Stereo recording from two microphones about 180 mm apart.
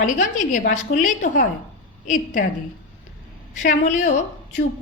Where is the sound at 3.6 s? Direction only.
40° left (ahead or behind).